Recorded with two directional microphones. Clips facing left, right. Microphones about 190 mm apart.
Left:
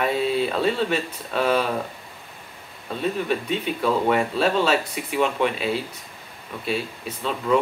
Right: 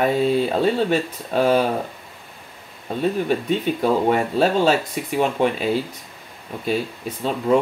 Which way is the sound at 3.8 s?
40° right (ahead or behind).